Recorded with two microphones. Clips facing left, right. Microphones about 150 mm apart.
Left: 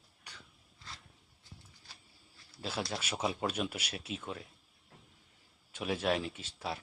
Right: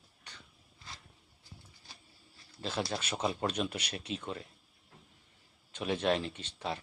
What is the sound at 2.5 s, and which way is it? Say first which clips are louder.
A man's voice: right 2 dB; 10° left (ahead or behind).